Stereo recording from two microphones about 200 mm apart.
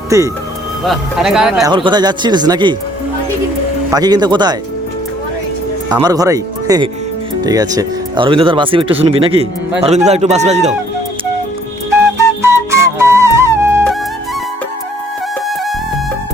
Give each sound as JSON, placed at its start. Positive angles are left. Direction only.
{"t": 0.1, "sound": "speech", "side_deg": -15}
{"t": 0.9, "sound": "speech", "side_deg": 0}
{"t": 1.6, "sound": "speech", "side_deg": -25}
{"t": 3.9, "sound": "speech", "side_deg": -20}
{"t": 5.9, "sound": "speech", "side_deg": -20}
{"t": 12.4, "sound": "flute", "side_deg": -15}